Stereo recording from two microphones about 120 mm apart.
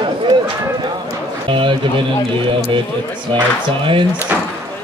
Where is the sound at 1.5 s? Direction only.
45° right (ahead or behind).